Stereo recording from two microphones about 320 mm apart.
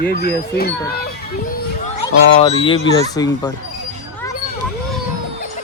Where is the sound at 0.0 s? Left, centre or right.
Left.